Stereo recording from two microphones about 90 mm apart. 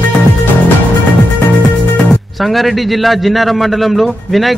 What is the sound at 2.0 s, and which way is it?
Speech, 5° left (ahead or behind).